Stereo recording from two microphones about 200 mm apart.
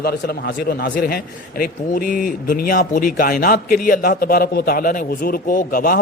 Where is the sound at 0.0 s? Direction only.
50° left (ahead or behind).